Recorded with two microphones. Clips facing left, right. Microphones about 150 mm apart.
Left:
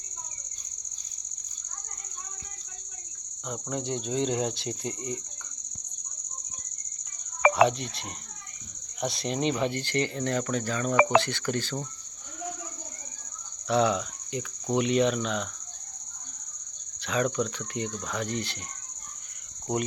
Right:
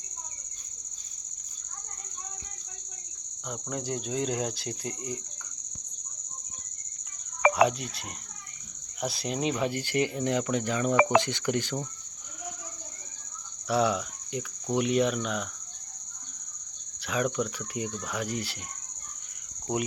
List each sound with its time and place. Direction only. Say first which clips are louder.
3.4 s speech: left 2 dB; centre (ahead or behind)
7.5 s speech: left 1 dB; centre (ahead or behind)
13.7 s speech: left 2 dB; 5° right (ahead or behind)
17.0 s speech: left 1 dB; 5° right (ahead or behind)